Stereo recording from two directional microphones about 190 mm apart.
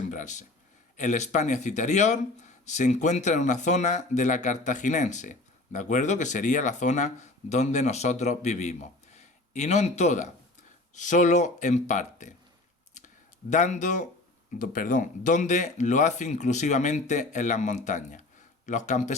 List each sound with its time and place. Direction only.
0.1 s speech: 40° left (ahead or behind)
13.5 s speech: 40° left (ahead or behind)